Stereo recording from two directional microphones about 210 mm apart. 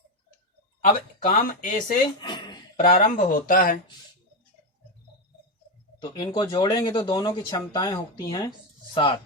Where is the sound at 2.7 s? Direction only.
40° left (ahead or behind).